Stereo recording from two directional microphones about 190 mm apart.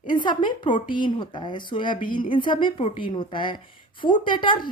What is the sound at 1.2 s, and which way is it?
A woman's voice, 25° left (ahead or behind).